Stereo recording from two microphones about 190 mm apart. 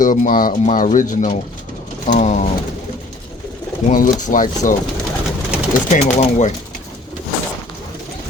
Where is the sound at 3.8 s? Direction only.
40° left (ahead or behind).